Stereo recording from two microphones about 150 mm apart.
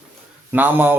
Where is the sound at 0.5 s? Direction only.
10° right (ahead or behind).